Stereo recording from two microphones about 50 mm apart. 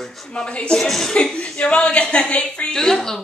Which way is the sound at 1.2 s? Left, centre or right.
Left.